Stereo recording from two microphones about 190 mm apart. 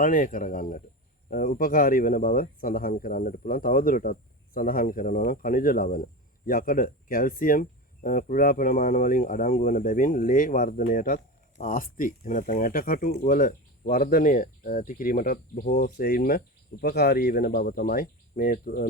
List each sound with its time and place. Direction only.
0.0 s speech: 45° left (ahead or behind)